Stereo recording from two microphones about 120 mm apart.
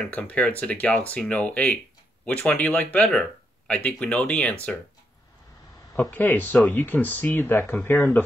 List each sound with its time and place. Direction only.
0.0 s speech: 10° left (ahead or behind)
6.1 s speech: 15° left (ahead or behind)